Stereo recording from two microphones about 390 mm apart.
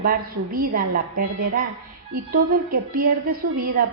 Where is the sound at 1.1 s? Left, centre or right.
Right.